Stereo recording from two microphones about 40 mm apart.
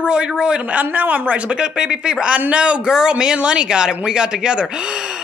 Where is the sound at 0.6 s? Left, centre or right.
Right.